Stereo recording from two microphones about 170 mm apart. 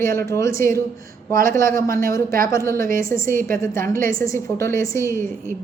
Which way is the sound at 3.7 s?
55° right (ahead or behind).